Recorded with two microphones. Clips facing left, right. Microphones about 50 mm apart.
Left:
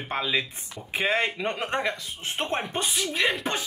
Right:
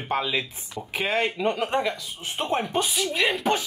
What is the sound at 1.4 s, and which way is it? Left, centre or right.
Speech, left.